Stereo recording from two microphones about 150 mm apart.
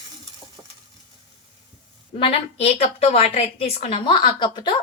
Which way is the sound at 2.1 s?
40° left (ahead or behind).